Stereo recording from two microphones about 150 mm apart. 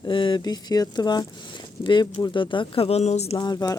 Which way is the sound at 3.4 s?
25° left (ahead or behind).